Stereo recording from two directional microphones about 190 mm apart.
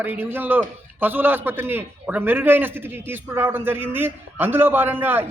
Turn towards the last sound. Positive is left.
turn(degrees=-10)  # may be behind; listen again after turning